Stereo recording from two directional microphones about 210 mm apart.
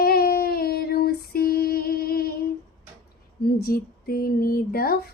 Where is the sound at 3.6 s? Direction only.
45° left (ahead or behind).